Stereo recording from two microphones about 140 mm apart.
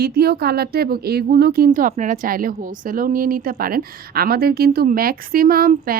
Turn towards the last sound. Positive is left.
turn(degrees=-90)